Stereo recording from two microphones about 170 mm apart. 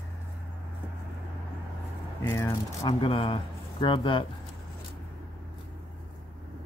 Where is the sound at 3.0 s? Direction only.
30° left (ahead or behind).